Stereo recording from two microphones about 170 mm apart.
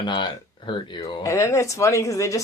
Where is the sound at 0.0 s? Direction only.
30° left (ahead or behind).